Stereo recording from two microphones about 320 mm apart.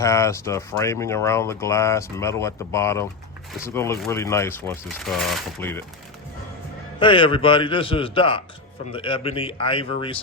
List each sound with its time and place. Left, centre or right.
0.0 s speech: centre
7.0 s speech: centre